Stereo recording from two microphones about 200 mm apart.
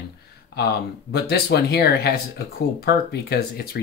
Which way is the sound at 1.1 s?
50° left (ahead or behind).